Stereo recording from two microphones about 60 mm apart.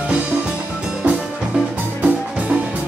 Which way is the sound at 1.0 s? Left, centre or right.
Right.